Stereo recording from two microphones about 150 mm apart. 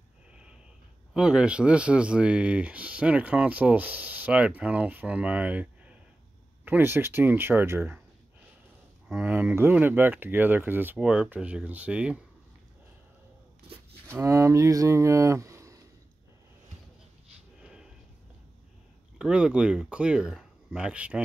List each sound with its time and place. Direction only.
0.3 s a sound: 5° right (ahead or behind)
1.1 s speech: 5° right (ahead or behind)
9.1 s speech: 10° right (ahead or behind)
14.1 s speech: 20° right (ahead or behind)
17.6 s snort: 5° right (ahead or behind)
19.1 s speech: 5° right (ahead or behind)